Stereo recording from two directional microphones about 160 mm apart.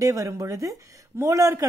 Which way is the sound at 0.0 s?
20° right (ahead or behind).